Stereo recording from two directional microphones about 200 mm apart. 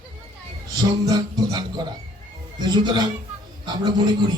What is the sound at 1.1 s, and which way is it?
A man's voice, 20° right (ahead or behind).